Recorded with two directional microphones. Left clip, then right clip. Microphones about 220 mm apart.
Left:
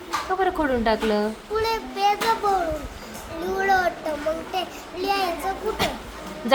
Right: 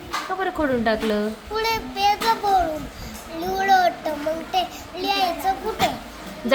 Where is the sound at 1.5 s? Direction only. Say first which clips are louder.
Right 1 dB; 15° left (ahead or behind).